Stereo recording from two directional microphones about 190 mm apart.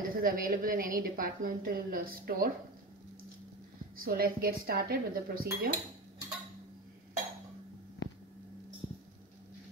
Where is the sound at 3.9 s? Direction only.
50° right (ahead or behind).